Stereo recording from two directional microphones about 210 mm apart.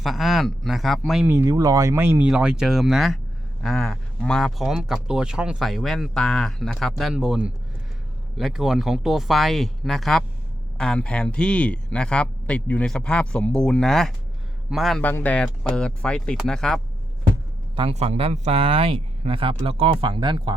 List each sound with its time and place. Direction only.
0.0 s speech: centre (ahead or behind)
17.7 s speech: 30° right (ahead or behind)